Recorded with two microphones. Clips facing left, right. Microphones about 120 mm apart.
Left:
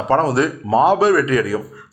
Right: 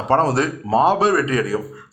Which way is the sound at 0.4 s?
25° left (ahead or behind).